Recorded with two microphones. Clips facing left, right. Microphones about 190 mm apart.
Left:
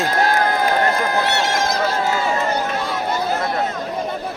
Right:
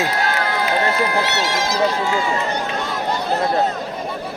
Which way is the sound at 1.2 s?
50° left (ahead or behind).